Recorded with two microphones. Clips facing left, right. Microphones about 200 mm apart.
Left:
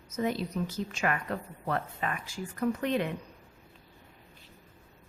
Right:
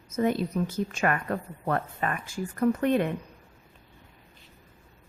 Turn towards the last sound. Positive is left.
turn(degrees=-50)  # may be behind; listen again after turning